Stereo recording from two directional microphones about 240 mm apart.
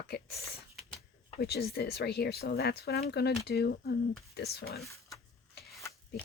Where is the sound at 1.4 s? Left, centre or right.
Left.